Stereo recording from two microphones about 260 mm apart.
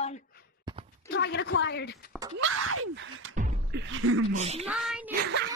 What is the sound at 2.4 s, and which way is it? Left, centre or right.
Gasp, right.